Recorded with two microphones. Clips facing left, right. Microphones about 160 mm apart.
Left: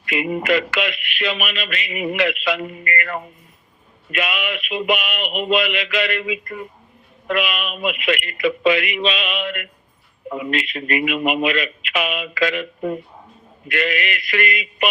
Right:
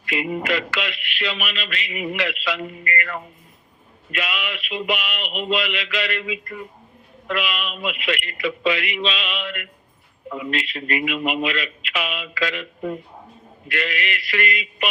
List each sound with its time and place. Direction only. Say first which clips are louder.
0.0 s speech: left 3 dB; 60° left (ahead or behind)